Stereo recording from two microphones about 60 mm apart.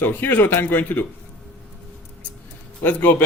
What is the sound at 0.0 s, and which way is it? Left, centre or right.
Speech, left.